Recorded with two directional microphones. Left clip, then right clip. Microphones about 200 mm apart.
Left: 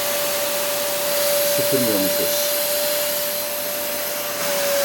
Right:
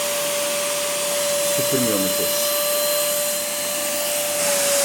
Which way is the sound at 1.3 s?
15° left (ahead or behind).